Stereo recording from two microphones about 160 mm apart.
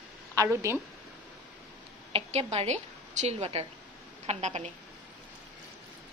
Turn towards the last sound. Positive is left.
turn(degrees=-50)  # may be behind; listen again after turning